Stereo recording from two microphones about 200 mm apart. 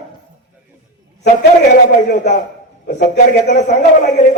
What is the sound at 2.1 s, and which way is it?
A man's voice, 40° left (ahead or behind).